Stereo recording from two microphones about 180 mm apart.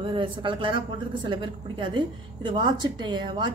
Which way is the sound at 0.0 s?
25° right (ahead or behind).